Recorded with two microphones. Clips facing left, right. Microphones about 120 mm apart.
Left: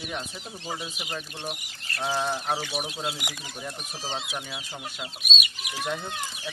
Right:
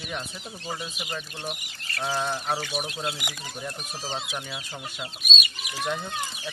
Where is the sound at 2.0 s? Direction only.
10° left (ahead or behind).